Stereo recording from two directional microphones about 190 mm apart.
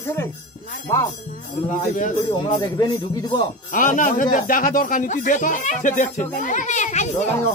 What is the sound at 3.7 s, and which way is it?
Speech, 45° left (ahead or behind).